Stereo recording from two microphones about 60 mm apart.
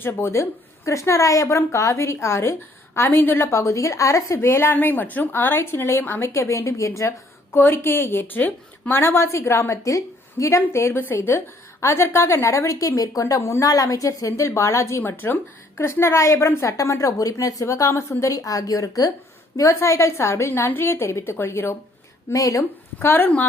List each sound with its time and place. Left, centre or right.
0.0 s a woman's voice: left
0.9 s a woman's voice: left
3.4 s a woman's voice: left
4.4 s speech: left
5.3 s a woman's voice: left
7.5 s a woman's voice: left
8.9 s a woman's voice: left
13.6 s a woman's voice: left
15.0 s a woman's voice: left
18.2 s a woman's voice: left
19.5 s a woman's voice: left
20.5 s a woman's voice: left
22.3 s a woman's voice: left
23.0 s speech: left